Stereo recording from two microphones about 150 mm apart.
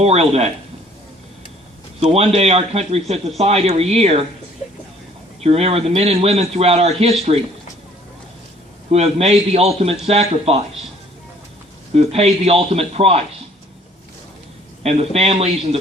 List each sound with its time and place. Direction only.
0.0 s a man's voice: 45° right (ahead or behind)
2.0 s a man's voice: 40° right (ahead or behind)
5.4 s a man's voice: 40° right (ahead or behind)
8.9 s a man's voice: 45° right (ahead or behind)
11.9 s a man's voice: 45° right (ahead or behind)
14.8 s a man's voice: 45° right (ahead or behind)